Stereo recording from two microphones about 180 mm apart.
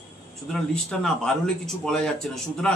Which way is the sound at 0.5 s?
Centre (ahead or behind).